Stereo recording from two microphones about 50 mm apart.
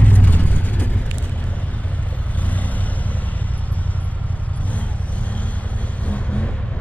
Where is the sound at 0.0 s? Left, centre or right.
Left.